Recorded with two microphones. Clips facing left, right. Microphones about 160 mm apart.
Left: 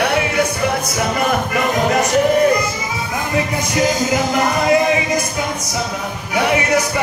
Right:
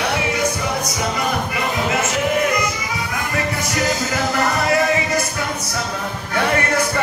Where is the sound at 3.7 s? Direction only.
20° left (ahead or behind).